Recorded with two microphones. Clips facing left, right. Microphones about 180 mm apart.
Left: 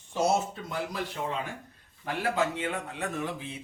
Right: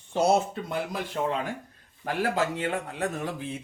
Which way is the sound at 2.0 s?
40° right (ahead or behind).